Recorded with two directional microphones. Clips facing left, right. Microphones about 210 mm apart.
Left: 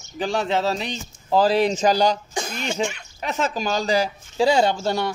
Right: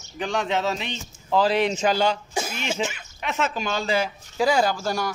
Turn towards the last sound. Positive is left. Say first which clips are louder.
# left 3 dB
turn(degrees=25)  # may be behind; listen again after turning